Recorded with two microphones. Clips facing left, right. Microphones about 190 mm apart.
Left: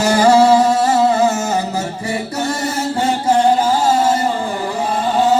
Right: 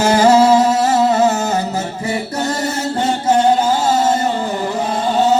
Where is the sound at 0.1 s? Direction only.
25° right (ahead or behind).